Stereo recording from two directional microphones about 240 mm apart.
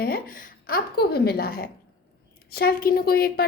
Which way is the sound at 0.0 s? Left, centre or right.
Left.